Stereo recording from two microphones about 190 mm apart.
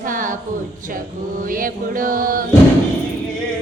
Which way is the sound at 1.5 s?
45° right (ahead or behind).